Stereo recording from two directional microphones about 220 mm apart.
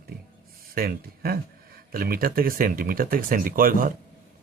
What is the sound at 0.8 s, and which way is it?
Speech, 45° right (ahead or behind).